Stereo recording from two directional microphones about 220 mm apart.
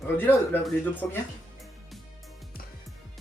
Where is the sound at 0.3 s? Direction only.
10° left (ahead or behind).